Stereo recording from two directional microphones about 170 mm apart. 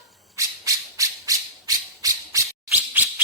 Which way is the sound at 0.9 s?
20° right (ahead or behind).